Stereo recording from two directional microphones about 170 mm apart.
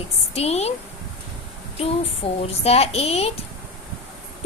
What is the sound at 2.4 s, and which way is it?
Speech, 40° left (ahead or behind).